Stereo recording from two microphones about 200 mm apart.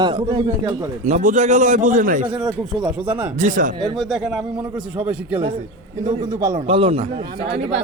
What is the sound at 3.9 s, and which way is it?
A man's voice, centre (ahead or behind).